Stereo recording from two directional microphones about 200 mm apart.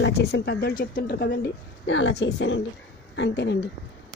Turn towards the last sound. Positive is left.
turn(degrees=60)  # may be behind; listen again after turning